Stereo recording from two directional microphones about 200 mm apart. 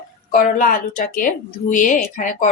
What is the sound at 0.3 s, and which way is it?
A woman's voice, 40° left (ahead or behind).